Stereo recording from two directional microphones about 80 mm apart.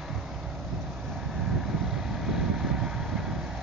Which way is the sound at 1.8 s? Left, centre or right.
Centre.